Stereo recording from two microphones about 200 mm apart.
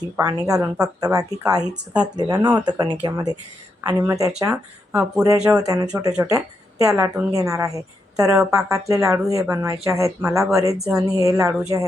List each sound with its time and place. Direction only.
0.2 s a woman's voice: 20° right (ahead or behind)
1.6 s speech: 5° right (ahead or behind)
2.1 s a woman's voice: 20° right (ahead or behind)